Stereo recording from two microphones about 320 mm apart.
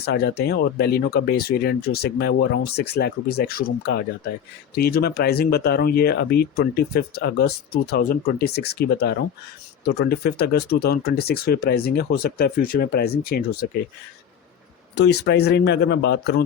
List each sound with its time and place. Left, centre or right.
0.0 s speech: left
9.8 s speech: left
10.1 s speech: left
14.9 s speech: left